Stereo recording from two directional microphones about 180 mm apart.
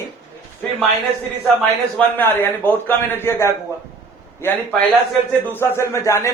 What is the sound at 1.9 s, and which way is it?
A man's voice, 10° left (ahead or behind).